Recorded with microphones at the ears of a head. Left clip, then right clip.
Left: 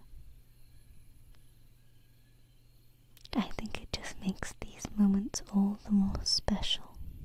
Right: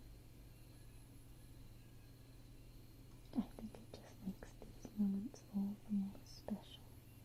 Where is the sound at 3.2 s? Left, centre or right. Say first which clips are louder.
Left 11 dB; left.